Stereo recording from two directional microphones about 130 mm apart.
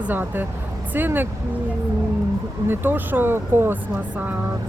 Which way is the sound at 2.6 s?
15° right (ahead or behind).